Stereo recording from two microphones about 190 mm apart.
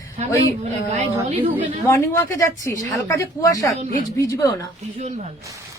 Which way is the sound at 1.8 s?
15° left (ahead or behind).